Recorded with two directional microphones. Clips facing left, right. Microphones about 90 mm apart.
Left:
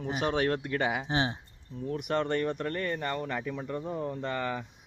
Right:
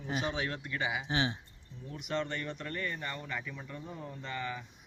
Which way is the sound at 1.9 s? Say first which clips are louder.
Left 6 dB; 55° left (ahead or behind).